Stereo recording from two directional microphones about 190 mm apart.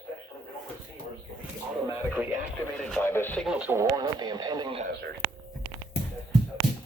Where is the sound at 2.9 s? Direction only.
10° left (ahead or behind).